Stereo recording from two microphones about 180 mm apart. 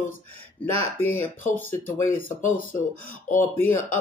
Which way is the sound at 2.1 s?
50° left (ahead or behind).